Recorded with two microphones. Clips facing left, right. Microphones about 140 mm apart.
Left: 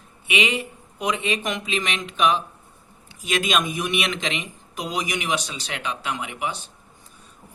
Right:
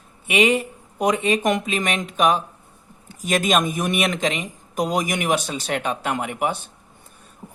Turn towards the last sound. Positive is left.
turn(degrees=-50)  # may be behind; listen again after turning